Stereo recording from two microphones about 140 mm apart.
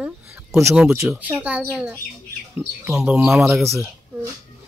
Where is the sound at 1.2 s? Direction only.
10° right (ahead or behind).